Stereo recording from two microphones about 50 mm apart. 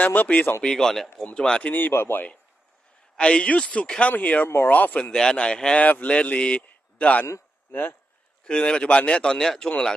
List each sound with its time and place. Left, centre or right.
0.0 s speech: left
0.6 s speech: centre
1.7 s speech: left
3.2 s a man's voice: centre
4.1 s speech: left
5.1 s speech: centre
5.8 s a man's voice: left
8.5 s speech: centre